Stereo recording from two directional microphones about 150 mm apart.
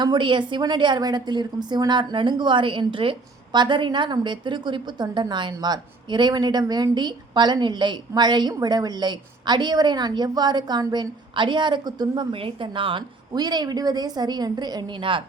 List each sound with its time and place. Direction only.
0.0 s a woman's voice: 30° right (ahead or behind)